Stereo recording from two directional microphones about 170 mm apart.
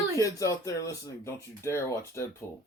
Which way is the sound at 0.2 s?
20° left (ahead or behind).